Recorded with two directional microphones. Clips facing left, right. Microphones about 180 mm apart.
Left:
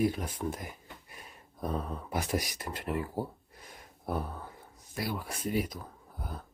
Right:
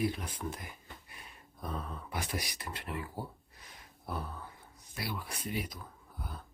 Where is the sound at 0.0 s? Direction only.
45° left (ahead or behind).